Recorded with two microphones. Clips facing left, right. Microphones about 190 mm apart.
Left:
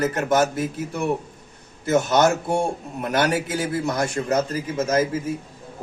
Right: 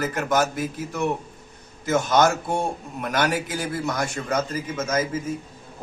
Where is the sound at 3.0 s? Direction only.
30° left (ahead or behind).